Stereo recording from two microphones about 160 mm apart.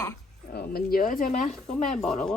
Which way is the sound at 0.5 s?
75° left (ahead or behind).